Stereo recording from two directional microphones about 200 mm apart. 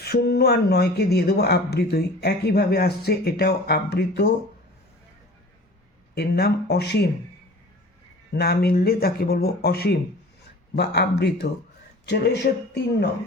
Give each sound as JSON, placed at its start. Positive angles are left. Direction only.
{"t": 0.0, "sound": "speech", "side_deg": 55}
{"t": 6.1, "sound": "speech", "side_deg": 55}
{"t": 8.3, "sound": "speech", "side_deg": 55}